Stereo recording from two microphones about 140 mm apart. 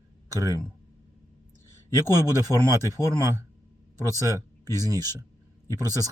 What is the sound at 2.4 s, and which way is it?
Speech, 20° right (ahead or behind).